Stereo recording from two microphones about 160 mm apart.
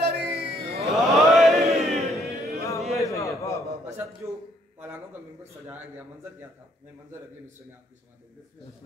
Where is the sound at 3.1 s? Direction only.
20° left (ahead or behind).